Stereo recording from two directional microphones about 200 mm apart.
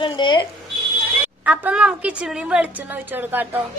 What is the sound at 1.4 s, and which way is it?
A woman's voice, 5° right (ahead or behind).